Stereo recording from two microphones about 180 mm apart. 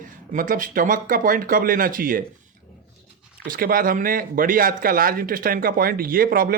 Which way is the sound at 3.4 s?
50° right (ahead or behind).